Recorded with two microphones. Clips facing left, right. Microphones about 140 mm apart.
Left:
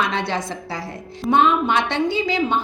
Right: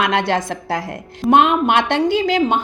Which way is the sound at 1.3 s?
75° right (ahead or behind).